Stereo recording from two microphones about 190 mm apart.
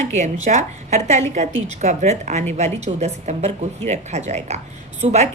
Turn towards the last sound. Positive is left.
turn(degrees=-35)  # may be behind; listen again after turning